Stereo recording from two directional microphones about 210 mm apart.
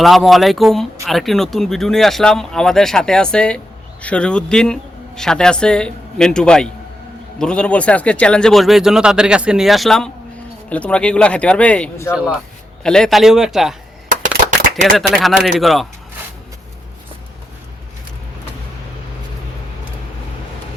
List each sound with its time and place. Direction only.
0.0 s speech: centre (ahead or behind)
14.9 s speech: centre (ahead or behind)